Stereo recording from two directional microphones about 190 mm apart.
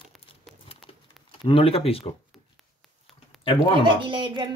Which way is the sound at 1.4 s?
30° left (ahead or behind).